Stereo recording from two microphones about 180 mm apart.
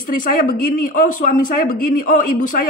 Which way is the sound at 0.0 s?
50° left (ahead or behind).